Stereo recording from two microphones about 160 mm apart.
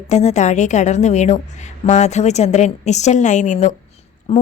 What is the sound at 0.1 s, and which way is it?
A woman's voice, 45° left (ahead or behind).